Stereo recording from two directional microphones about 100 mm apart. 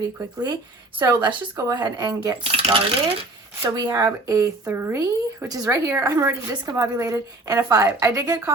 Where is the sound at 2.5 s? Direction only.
65° right (ahead or behind).